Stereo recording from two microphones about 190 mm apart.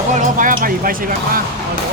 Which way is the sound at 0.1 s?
45° right (ahead or behind).